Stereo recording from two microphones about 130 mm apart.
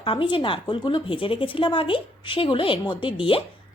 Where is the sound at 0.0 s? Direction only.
40° left (ahead or behind).